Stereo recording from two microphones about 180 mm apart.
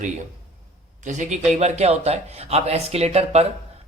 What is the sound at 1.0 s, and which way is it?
A man's voice, 45° right (ahead or behind).